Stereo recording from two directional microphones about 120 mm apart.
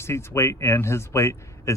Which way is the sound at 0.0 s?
20° left (ahead or behind).